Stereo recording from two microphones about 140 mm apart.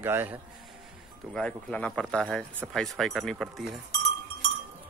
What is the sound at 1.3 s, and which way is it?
Speech, 5° left (ahead or behind).